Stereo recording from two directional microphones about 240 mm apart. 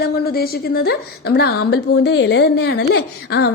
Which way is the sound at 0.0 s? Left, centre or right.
Left.